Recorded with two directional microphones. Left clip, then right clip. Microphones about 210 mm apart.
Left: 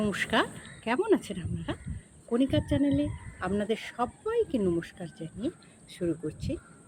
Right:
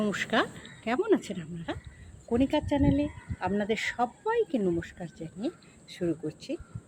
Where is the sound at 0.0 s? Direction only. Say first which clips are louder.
Even; 5° left (ahead or behind).